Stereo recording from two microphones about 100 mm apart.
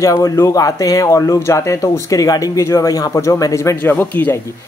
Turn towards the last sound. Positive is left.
turn(degrees=20)  # may be behind; listen again after turning